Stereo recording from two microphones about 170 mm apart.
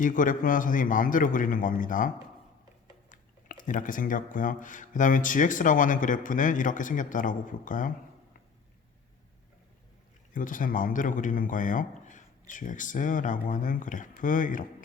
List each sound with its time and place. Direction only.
0.0 s speech: 50° left (ahead or behind)
3.1 s speech: 50° left (ahead or behind)
10.3 s speech: 50° left (ahead or behind)